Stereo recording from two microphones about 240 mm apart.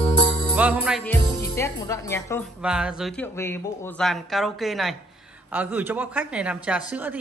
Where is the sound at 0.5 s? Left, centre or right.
Centre.